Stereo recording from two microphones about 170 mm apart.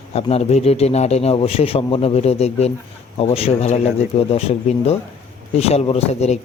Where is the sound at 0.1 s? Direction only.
35° left (ahead or behind).